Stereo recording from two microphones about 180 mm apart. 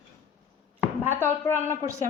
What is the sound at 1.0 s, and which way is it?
Speech, 10° right (ahead or behind).